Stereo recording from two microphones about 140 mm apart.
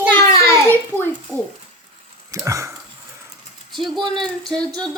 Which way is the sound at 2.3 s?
20° right (ahead or behind).